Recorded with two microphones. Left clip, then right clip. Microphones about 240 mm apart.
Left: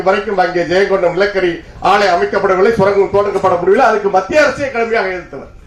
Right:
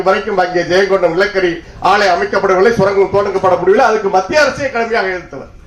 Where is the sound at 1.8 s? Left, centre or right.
Right.